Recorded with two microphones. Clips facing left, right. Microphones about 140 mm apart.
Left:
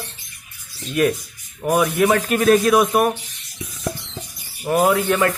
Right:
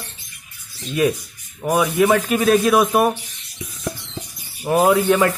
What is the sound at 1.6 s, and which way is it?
A man's voice, centre (ahead or behind).